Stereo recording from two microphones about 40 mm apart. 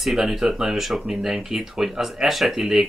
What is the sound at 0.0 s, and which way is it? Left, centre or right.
Speech, centre.